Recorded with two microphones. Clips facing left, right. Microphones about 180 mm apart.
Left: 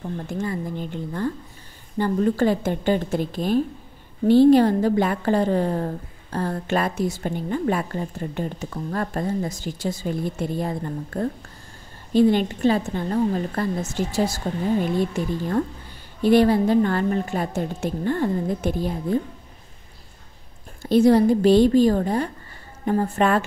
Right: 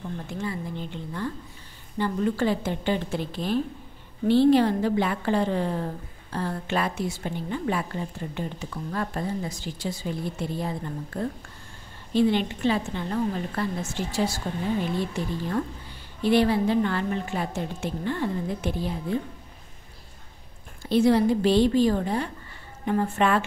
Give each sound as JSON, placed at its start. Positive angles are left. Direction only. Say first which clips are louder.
{"t": 0.3, "sound": "a woman's voice", "louder": "left 5 dB", "side_deg": 45}
{"t": 20.8, "sound": "a woman's voice", "louder": "left 4 dB", "side_deg": 45}